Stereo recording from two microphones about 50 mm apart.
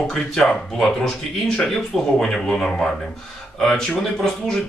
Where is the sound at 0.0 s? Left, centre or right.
Centre.